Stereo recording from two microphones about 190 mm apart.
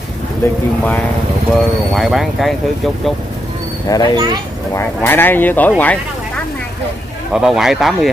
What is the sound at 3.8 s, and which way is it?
Speech, 20° left (ahead or behind).